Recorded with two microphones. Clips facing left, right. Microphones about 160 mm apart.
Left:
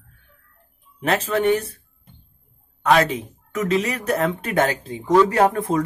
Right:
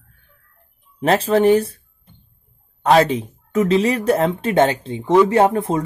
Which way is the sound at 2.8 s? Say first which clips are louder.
Right 3 dB; 30° right (ahead or behind).